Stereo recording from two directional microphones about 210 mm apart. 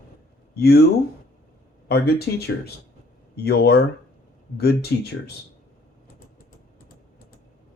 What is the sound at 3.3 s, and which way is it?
Speech, 50° left (ahead or behind).